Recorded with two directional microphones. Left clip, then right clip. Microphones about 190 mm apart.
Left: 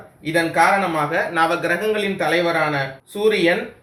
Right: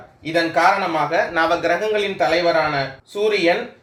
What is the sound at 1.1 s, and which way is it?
Speech, 45° right (ahead or behind).